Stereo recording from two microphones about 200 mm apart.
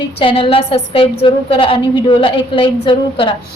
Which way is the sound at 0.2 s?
25° left (ahead or behind).